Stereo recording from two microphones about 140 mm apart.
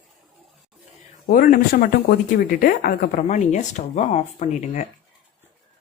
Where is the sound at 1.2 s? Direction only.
90° left; by 4.9 s 60° left (ahead or behind).